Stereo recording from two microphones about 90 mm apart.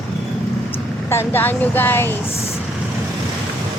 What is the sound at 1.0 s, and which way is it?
Speech, 25° left (ahead or behind).